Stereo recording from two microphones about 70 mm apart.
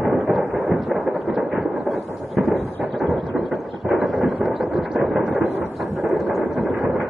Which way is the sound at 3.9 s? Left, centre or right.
Centre.